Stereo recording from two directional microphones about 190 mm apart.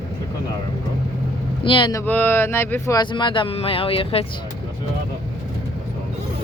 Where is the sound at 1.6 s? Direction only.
25° left (ahead or behind).